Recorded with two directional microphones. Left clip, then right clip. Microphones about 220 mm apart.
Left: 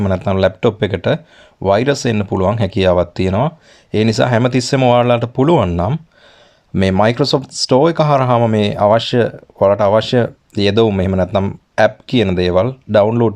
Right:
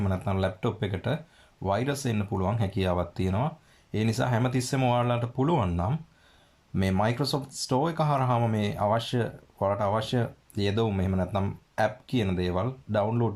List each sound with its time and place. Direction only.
0.0 s speech: 40° left (ahead or behind)